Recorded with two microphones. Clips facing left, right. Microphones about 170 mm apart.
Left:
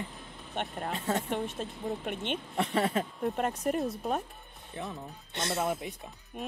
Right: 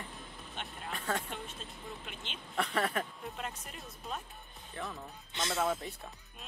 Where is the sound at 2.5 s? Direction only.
25° left (ahead or behind).